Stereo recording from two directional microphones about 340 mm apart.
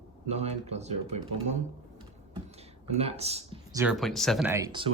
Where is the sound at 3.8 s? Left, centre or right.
Centre.